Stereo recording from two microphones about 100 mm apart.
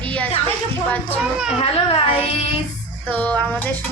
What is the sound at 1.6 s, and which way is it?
Speech, 75° left (ahead or behind).